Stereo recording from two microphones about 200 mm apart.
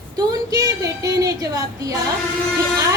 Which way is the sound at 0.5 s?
15° right (ahead or behind).